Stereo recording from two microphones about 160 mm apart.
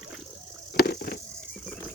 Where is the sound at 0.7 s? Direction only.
75° left (ahead or behind).